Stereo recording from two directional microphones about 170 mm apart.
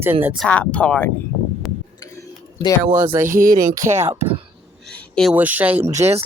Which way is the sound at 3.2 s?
55° right (ahead or behind).